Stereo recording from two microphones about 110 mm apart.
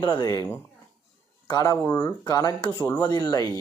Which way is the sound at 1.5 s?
30° left (ahead or behind).